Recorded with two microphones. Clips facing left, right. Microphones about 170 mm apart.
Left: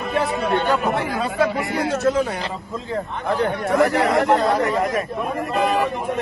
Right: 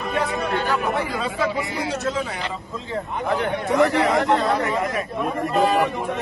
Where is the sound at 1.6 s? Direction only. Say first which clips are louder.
Left 3 dB; centre (ahead or behind).